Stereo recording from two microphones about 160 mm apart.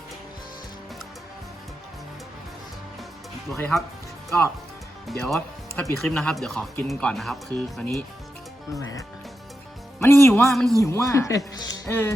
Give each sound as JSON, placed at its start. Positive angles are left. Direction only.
{"t": 3.6, "sound": "speech", "side_deg": 5}
{"t": 5.0, "sound": "speech", "side_deg": 0}
{"t": 8.7, "sound": "speech", "side_deg": 20}
{"t": 10.4, "sound": "speech", "side_deg": 0}
{"t": 10.8, "sound": "speech", "side_deg": 20}